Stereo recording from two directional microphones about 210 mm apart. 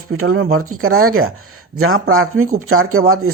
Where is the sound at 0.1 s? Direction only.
90° right.